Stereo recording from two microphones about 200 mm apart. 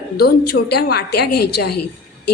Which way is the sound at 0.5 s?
50° left (ahead or behind).